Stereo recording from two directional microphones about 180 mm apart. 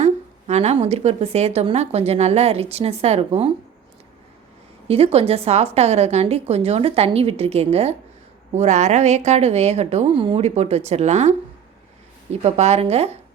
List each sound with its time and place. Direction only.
0.0 s a woman's voice: 35° right (ahead or behind)
4.9 s a woman's voice: 35° right (ahead or behind)
12.4 s a woman's voice: 35° right (ahead or behind)